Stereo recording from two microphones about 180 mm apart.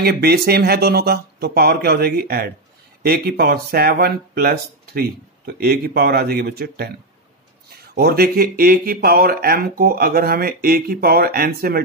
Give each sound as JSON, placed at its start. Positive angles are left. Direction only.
{"t": 0.0, "sound": "speech", "side_deg": -60}